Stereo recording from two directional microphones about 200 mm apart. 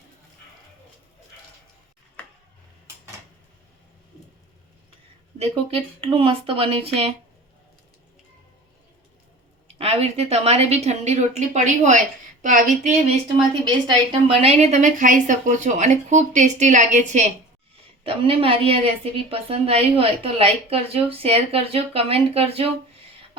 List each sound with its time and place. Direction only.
5.4 s a woman's voice: 30° right (ahead or behind)
9.6 s a woman's voice: 30° right (ahead or behind)
13.7 s a woman's voice: 25° right (ahead or behind)